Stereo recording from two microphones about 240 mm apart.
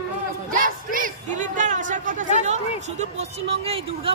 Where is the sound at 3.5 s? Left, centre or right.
Right.